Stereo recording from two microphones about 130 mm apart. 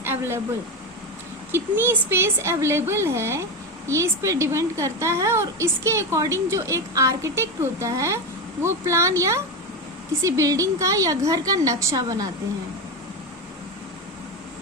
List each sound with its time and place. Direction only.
0.0 s vehicle: 15° right (ahead or behind)
1.5 s a woman's voice: 15° right (ahead or behind)